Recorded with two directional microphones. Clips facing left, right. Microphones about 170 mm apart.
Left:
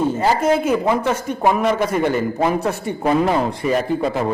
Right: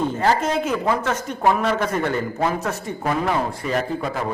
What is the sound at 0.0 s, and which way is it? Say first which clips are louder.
Speech: left 3 dB; 10° left (ahead or behind).